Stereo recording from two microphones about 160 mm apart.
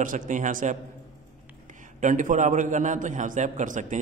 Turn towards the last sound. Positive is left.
turn(degrees=-50)  # may be behind; listen again after turning